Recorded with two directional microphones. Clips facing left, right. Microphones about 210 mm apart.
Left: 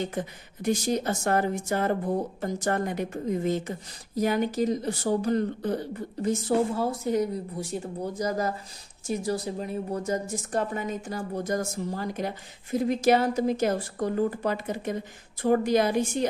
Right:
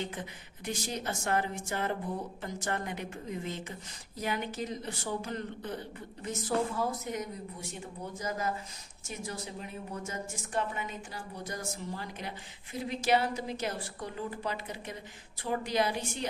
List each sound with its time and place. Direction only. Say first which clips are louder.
0.0 s a woman's voice: left 7 dB; 45° left (ahead or behind)